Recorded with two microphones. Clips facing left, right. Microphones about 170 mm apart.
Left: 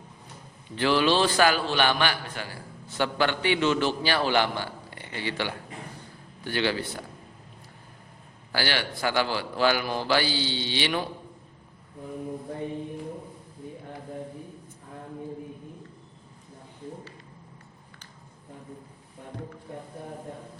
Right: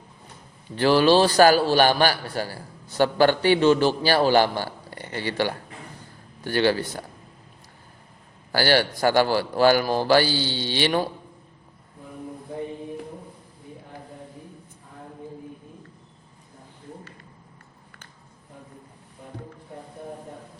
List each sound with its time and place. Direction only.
0.8 s a man's voice: 40° right (ahead or behind)
8.5 s a man's voice: 40° right (ahead or behind)